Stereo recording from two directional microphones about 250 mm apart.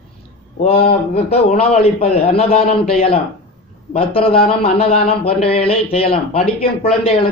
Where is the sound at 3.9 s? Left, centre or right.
Left.